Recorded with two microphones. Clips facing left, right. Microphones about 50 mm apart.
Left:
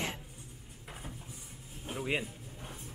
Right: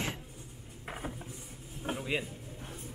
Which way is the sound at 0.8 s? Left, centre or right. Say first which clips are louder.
Right 7 dB; right.